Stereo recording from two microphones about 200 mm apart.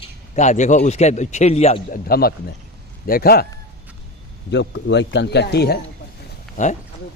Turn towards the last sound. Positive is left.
turn(degrees=35)  # may be behind; listen again after turning